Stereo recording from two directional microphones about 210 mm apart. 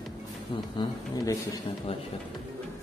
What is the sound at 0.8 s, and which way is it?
Speech, 20° left (ahead or behind).